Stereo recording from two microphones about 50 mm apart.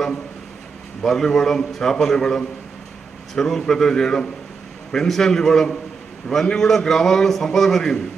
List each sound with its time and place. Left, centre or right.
1.0 s a man's voice: centre